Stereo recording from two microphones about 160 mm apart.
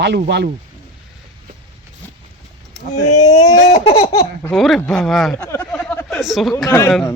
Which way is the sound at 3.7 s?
40° left (ahead or behind).